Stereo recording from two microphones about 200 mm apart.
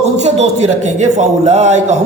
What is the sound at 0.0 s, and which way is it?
A man's voice, 35° right (ahead or behind).